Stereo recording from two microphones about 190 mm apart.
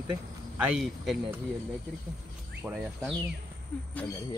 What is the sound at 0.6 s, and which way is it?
Speech, 5° right (ahead or behind).